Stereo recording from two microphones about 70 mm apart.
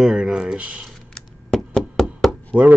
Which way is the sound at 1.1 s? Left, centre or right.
Centre.